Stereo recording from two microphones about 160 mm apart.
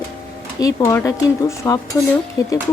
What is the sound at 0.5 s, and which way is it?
Speech, 20° left (ahead or behind).